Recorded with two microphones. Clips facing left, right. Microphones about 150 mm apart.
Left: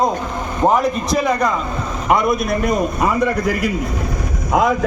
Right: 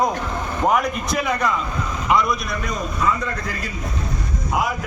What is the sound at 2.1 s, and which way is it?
A man's voice, 55° left (ahead or behind).